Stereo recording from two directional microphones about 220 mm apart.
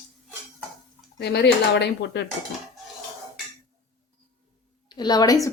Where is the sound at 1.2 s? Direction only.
50° left (ahead or behind).